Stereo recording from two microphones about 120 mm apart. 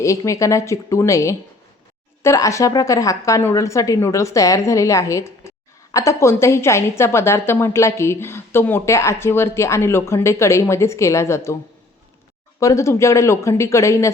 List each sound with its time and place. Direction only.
0.0 s a woman's voice: 25° left (ahead or behind)
12.5 s a woman's voice: 25° left (ahead or behind)